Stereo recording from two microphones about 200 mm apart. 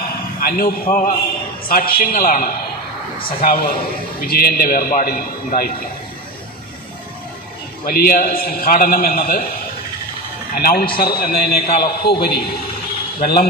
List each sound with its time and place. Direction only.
0.3 s a man's voice: 45° left (ahead or behind)
7.9 s a man's voice: 45° left (ahead or behind)
10.5 s a man's voice: 50° left (ahead or behind)